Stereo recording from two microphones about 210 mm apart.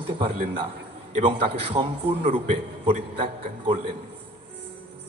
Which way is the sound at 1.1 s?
25° right (ahead or behind).